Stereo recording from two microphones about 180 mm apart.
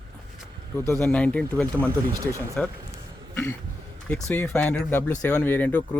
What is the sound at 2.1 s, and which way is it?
Speech, 20° right (ahead or behind).